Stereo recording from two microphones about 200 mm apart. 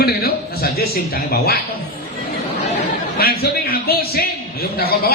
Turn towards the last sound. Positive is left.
turn(degrees=50)  # may be behind; listen again after turning